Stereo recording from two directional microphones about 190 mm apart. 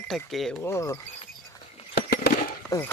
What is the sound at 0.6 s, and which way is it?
Speech, 15° left (ahead or behind).